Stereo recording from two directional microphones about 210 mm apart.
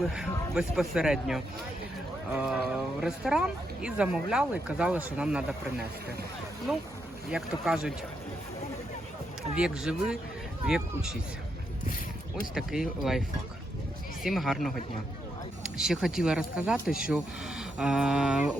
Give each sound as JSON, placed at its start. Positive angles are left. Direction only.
{"t": 0.1, "sound": "speech", "side_deg": -5}
{"t": 7.3, "sound": "speech", "side_deg": -5}
{"t": 9.6, "sound": "speech", "side_deg": -5}
{"t": 12.5, "sound": "speech", "side_deg": 0}
{"t": 14.3, "sound": "speech", "side_deg": 0}